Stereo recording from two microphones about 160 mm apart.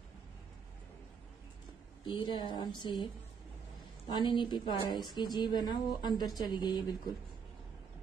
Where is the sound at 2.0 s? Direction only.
30° left (ahead or behind).